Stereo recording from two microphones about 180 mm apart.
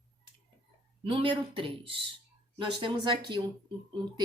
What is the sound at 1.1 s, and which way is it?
A woman's voice, 30° right (ahead or behind).